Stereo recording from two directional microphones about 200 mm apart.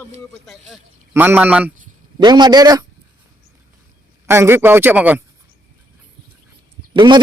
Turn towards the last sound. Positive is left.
turn(degrees=-20)  # may be behind; listen again after turning